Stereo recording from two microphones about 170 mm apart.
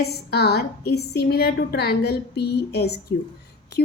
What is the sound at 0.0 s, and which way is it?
A woman's voice, 70° left (ahead or behind).